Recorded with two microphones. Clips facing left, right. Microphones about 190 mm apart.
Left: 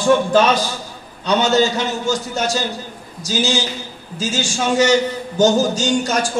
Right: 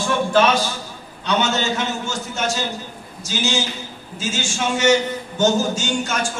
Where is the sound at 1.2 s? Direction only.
35° left (ahead or behind).